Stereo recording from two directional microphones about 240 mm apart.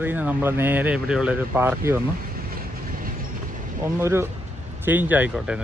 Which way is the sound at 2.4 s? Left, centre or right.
Right.